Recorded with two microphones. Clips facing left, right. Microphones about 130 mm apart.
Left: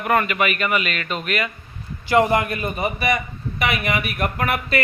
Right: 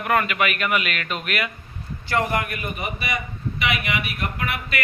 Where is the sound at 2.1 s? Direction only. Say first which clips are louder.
Left 6 dB; 20° left (ahead or behind).